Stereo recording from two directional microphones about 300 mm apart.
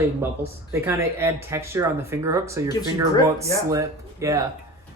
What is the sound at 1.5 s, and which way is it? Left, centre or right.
Speech, centre.